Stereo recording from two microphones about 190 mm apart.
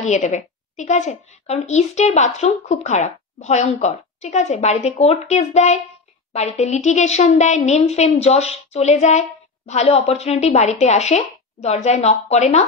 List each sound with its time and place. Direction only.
0.0 s a woman's voice: 40° left (ahead or behind)